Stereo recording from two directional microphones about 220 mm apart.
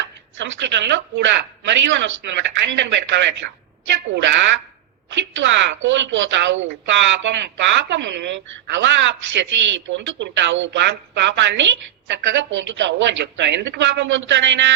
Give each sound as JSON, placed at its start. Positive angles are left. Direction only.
{"t": 0.0, "sound": "speech", "side_deg": -55}